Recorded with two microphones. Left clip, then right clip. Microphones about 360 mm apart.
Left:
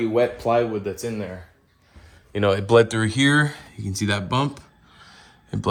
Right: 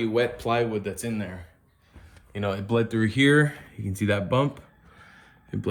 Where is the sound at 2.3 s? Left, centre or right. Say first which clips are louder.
Left 10 dB; left.